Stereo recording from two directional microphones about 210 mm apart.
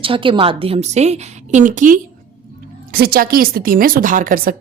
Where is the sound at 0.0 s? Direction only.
25° right (ahead or behind).